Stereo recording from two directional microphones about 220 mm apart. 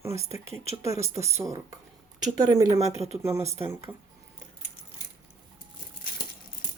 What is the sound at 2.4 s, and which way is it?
Speech, 15° right (ahead or behind).